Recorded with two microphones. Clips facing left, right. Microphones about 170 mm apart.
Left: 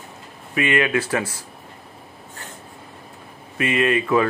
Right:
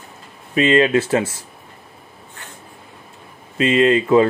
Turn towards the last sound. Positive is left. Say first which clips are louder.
# right 5 dB
turn(degrees=-25)  # may be behind; listen again after turning